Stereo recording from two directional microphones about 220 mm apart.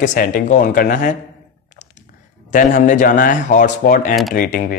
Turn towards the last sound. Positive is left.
turn(degrees=40)  # may be behind; listen again after turning